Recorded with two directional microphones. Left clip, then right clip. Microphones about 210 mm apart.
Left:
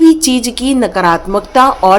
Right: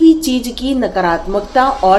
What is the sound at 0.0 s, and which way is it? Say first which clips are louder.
A woman's voice: left 2 dB; 30° left (ahead or behind).